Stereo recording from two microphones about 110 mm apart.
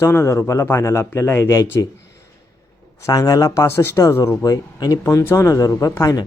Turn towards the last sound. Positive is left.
turn(degrees=30)  # may be behind; listen again after turning